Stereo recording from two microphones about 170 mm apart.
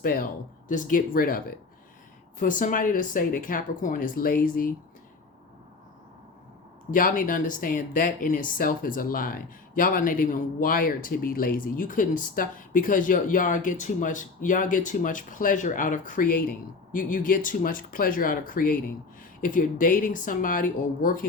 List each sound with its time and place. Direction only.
0.0 s speech: 55° left (ahead or behind)
6.9 s speech: 50° left (ahead or behind)